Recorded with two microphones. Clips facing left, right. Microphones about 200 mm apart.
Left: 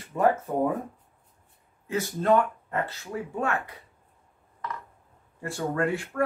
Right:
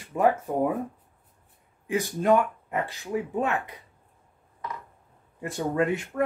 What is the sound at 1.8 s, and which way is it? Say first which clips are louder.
Speech: right 1 dB; 15° right (ahead or behind).